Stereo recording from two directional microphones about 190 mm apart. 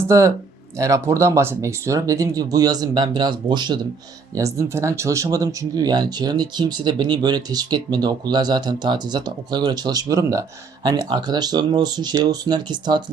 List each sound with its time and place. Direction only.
0.1 s speech: 15° right (ahead or behind)